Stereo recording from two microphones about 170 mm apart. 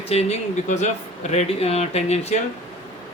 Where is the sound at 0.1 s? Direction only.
40° left (ahead or behind).